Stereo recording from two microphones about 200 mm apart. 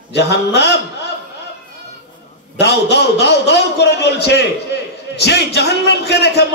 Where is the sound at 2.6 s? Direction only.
55° left (ahead or behind).